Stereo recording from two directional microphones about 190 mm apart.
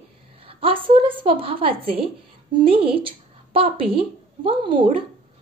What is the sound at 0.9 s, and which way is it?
A woman's voice, 30° right (ahead or behind).